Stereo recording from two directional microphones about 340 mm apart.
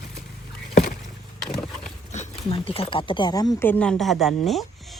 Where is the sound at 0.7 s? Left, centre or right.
Left.